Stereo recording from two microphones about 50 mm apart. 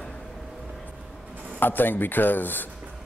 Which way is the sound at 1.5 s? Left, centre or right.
Left.